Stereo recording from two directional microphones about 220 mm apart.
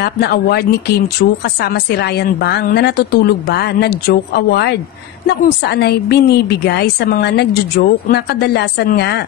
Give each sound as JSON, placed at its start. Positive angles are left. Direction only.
{"t": 0.0, "sound": "a woman's voice", "side_deg": 45}